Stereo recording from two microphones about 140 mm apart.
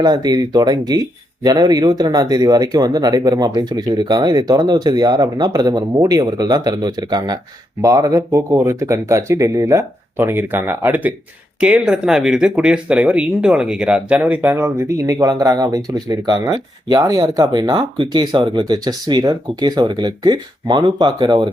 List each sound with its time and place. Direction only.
0.0 s speech: 30° right (ahead or behind)